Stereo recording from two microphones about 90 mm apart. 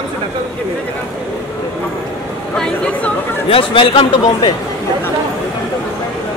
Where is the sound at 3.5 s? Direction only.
70° left (ahead or behind).